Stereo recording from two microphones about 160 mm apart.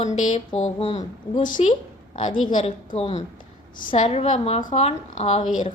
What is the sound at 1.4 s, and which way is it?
Speech, 55° left (ahead or behind).